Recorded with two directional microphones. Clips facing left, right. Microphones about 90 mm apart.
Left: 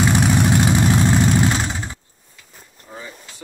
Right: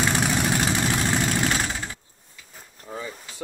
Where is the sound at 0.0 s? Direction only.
15° left (ahead or behind).